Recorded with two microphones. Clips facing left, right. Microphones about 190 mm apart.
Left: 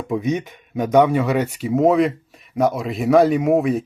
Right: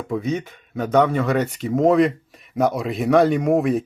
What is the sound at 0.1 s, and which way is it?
Speech, 15° left (ahead or behind).